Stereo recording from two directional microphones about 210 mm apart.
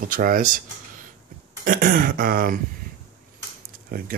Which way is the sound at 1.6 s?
40° right (ahead or behind).